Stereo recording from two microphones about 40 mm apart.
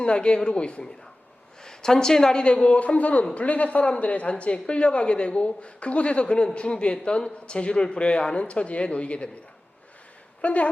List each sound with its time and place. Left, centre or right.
0.0 s a woman's voice: left
2.4 s a man's voice: left
10.4 s a man's voice: left